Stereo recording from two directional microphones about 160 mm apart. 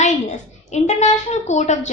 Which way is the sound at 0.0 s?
50° left (ahead or behind).